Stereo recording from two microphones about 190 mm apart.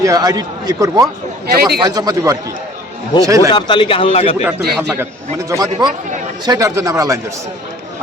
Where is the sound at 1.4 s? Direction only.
55° right (ahead or behind).